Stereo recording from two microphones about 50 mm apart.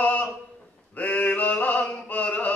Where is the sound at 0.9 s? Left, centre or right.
Left.